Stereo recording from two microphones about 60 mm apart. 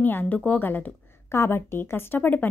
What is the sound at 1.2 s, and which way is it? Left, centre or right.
Speech, left.